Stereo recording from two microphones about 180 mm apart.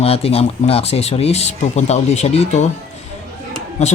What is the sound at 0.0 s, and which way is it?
Speech, 35° left (ahead or behind).